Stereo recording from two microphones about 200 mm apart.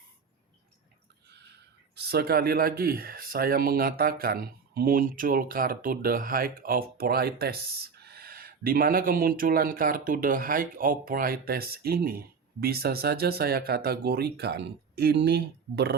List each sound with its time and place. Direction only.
2.0 s speech: 50° right (ahead or behind)